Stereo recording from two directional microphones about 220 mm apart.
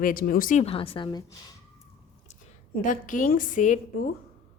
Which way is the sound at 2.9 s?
35° left (ahead or behind).